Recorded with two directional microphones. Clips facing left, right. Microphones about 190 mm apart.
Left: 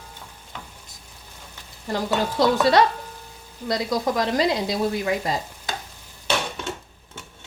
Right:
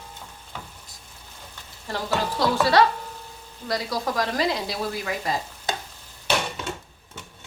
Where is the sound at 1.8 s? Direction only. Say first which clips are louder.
Left 3 dB; 20° left (ahead or behind).